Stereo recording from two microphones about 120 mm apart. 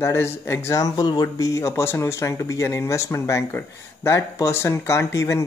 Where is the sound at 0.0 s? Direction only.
20° left (ahead or behind).